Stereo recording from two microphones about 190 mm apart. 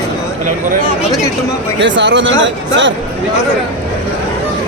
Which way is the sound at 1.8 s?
70° right (ahead or behind).